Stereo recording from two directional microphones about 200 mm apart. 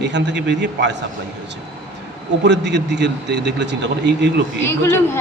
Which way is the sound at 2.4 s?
60° right (ahead or behind).